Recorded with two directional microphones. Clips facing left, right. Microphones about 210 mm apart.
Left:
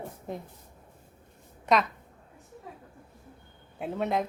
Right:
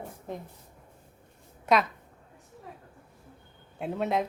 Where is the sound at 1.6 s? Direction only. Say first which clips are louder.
Even; centre (ahead or behind).